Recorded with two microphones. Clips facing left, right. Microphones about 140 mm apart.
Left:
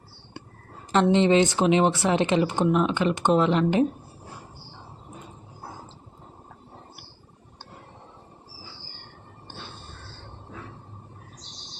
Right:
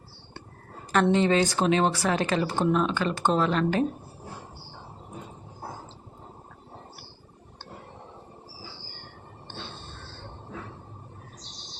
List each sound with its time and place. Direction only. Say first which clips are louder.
1.0 s speech: left 3 dB; 20° left (ahead or behind)
9.5 s music: right 1 dB; 10° left (ahead or behind)